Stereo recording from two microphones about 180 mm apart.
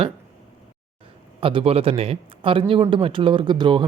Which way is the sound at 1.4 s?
30° right (ahead or behind).